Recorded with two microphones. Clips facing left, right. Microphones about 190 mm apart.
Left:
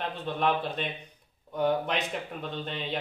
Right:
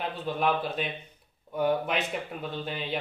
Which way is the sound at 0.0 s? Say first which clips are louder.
Even; centre (ahead or behind).